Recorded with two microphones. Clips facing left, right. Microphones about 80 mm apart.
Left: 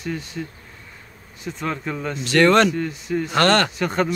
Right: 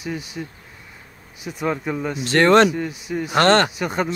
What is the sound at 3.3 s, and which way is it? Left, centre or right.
Speech, right.